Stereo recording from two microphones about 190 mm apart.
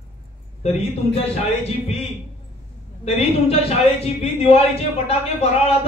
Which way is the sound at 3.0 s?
30° left (ahead or behind).